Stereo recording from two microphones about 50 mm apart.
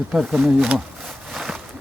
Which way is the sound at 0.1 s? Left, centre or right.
Centre.